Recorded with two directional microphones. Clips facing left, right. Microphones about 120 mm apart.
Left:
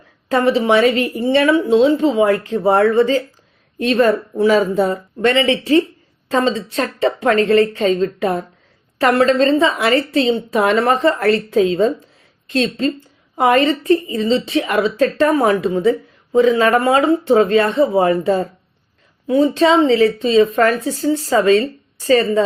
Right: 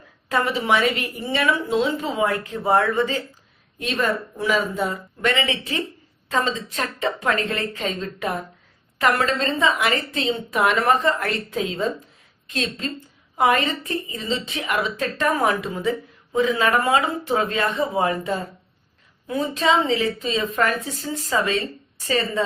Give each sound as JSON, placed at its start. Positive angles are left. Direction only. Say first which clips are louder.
{"t": 0.3, "sound": "a woman's voice", "louder": "left 7 dB", "side_deg": 30}